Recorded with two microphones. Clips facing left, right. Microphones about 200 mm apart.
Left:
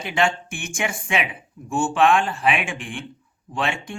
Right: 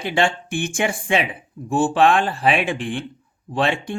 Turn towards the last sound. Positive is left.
turn(degrees=-35)  # may be behind; listen again after turning